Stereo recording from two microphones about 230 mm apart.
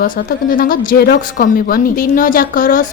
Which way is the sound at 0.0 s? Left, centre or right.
Left.